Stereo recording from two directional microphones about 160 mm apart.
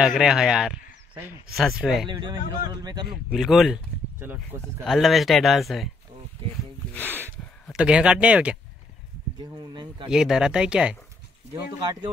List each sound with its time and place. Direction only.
0.2 s speech: 5° right (ahead or behind)
2.0 s speech: 30° right (ahead or behind)
3.1 s speech: centre (ahead or behind)
4.8 s speech: centre (ahead or behind)
7.1 s a sound: 15° right (ahead or behind)
7.7 s speech: 5° right (ahead or behind)
9.4 s speech: 30° right (ahead or behind)
10.0 s speech: 5° right (ahead or behind)
11.5 s speech: 25° right (ahead or behind)